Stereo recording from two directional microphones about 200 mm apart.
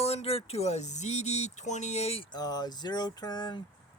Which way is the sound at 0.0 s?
30° left (ahead or behind).